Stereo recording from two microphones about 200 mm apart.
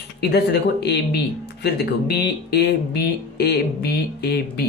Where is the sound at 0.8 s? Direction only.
55° left (ahead or behind).